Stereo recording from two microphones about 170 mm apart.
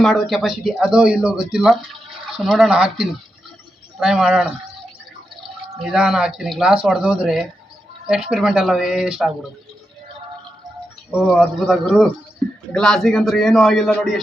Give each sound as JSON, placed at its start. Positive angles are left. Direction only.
{"t": 0.0, "sound": "speech", "side_deg": 0}
{"t": 5.8, "sound": "speech", "side_deg": -5}
{"t": 11.1, "sound": "speech", "side_deg": -5}